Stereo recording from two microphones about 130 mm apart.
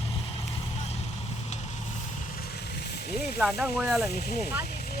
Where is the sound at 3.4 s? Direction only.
5° right (ahead or behind).